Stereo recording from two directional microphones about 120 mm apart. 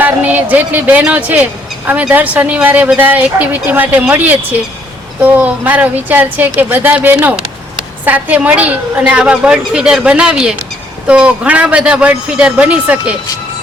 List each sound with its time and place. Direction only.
0.0 s a woman's voice: 15° right (ahead or behind)